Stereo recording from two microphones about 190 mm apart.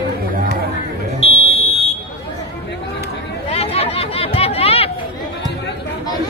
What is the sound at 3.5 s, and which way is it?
Chatter, 30° left (ahead or behind).